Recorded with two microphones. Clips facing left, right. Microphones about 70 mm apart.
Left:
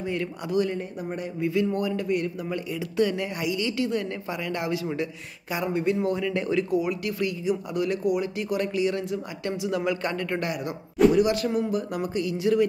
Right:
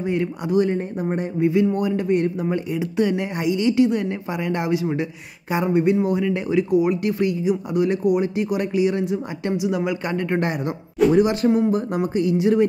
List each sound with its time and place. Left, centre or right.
0.0 s speech: right